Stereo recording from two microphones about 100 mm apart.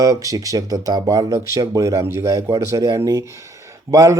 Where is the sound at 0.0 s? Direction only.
35° right (ahead or behind).